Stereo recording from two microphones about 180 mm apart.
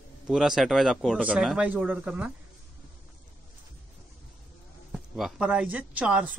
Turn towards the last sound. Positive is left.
turn(degrees=-5)  # may be behind; listen again after turning